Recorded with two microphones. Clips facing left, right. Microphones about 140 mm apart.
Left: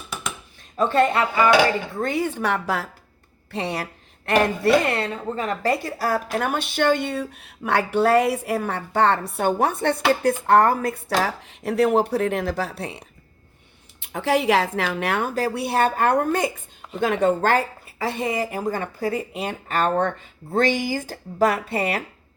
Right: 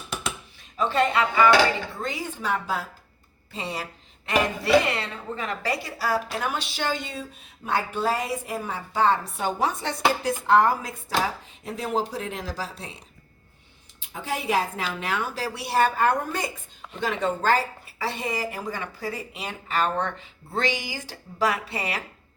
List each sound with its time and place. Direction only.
0.8 s a woman's voice: 50° left (ahead or behind)
4.9 s a woman's voice: 50° left (ahead or behind)